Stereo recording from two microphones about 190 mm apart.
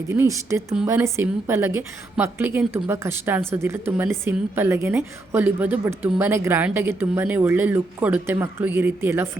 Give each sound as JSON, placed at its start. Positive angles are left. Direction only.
{"t": 0.2, "sound": "speech", "side_deg": -15}